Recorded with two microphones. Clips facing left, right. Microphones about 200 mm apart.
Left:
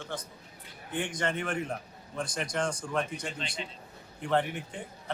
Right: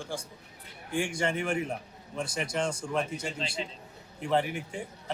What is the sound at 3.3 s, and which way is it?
Speech, 25° right (ahead or behind).